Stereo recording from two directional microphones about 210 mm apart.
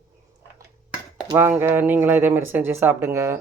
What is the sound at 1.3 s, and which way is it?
Speech, 10° right (ahead or behind).